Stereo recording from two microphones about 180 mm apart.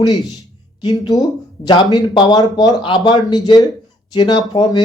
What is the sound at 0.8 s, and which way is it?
Speech, 20° left (ahead or behind).